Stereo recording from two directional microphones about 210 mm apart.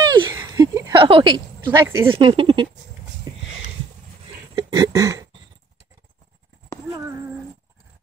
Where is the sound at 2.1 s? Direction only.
25° right (ahead or behind).